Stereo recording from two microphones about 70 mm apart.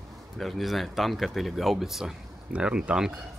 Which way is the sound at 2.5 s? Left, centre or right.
Centre.